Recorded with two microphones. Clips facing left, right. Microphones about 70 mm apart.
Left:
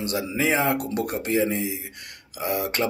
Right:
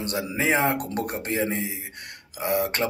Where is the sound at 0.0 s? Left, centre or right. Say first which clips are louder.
Left 1 dB; right.